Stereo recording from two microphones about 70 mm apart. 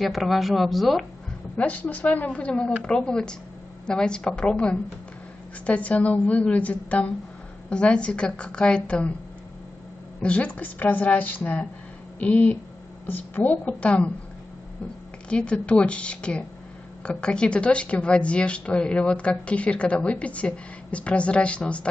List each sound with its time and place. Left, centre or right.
0.0 s speech: centre
1.6 s a woman's voice: left
10.2 s a woman's voice: centre
15.2 s a woman's voice: centre